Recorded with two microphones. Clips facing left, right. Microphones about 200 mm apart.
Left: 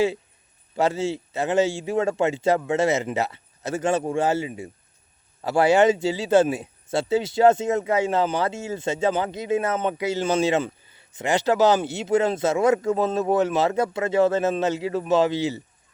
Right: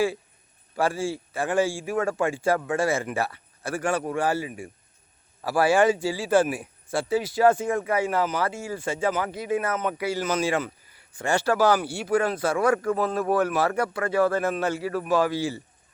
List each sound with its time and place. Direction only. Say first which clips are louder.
0.8 s a man's voice: left 3 dB; 20° left (ahead or behind)